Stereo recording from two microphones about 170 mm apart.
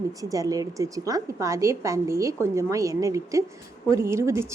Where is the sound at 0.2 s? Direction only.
20° right (ahead or behind).